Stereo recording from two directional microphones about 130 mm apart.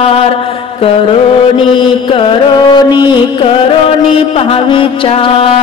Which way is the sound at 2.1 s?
40° left (ahead or behind).